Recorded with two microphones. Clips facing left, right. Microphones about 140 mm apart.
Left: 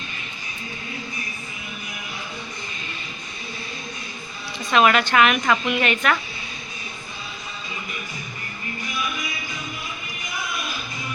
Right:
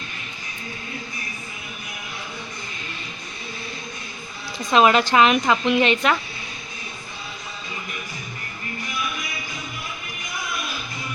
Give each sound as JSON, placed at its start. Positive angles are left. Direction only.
{"t": 4.7, "sound": "a woman's voice", "side_deg": -30}